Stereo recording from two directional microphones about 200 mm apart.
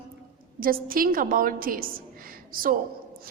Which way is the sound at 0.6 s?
45° right (ahead or behind).